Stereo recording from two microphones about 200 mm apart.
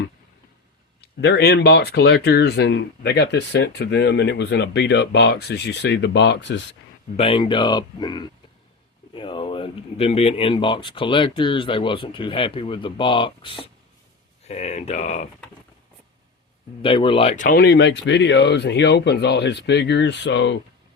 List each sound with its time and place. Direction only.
1.2 s speech: 55° left (ahead or behind)
7.2 s speech: 25° left (ahead or behind)
16.8 s speech: 25° left (ahead or behind); by 20.6 s 60° left (ahead or behind)